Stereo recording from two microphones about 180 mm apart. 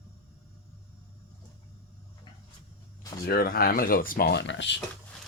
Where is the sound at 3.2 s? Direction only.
60° left (ahead or behind); by 4.8 s 85° left.